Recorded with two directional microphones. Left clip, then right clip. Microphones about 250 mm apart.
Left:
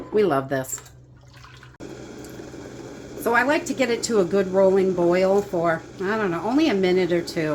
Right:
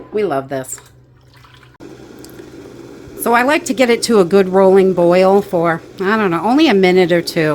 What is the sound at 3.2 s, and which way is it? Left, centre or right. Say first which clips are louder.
A woman's voice: right 7 dB; right.